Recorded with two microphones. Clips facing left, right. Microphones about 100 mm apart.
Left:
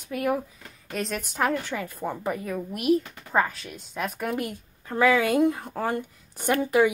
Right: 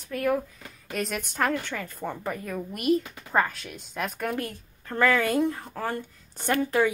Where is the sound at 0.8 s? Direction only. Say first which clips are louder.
Even; 5° right (ahead or behind); by 6.9 s 15° left (ahead or behind).